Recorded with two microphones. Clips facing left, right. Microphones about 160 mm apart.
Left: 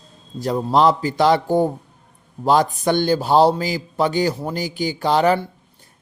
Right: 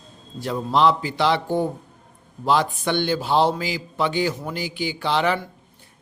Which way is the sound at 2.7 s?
40° left (ahead or behind).